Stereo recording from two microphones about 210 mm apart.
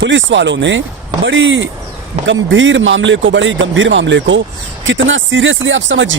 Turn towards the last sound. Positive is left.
turn(degrees=-65)  # may be behind; listen again after turning